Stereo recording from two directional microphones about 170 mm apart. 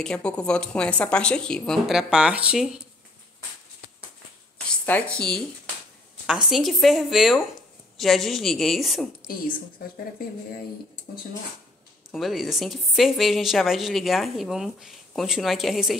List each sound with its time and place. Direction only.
0.0 s a woman's voice: 5° left (ahead or behind)
4.6 s speech: 10° left (ahead or behind)
6.2 s a woman's voice: 5° right (ahead or behind)
9.3 s a woman's voice: 55° left (ahead or behind)
12.1 s a woman's voice: centre (ahead or behind)